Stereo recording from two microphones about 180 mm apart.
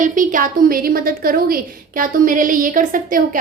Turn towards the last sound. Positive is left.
turn(degrees=-50)  # may be behind; listen again after turning